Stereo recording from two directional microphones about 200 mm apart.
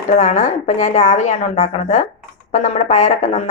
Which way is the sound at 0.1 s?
35° left (ahead or behind).